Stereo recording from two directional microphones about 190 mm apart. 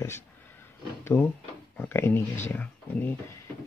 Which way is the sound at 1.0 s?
10° left (ahead or behind).